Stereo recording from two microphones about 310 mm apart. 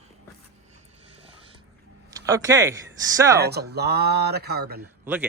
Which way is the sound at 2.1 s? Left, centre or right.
Centre.